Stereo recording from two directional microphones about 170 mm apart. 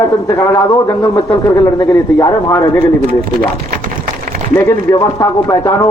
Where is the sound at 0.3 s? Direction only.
15° left (ahead or behind).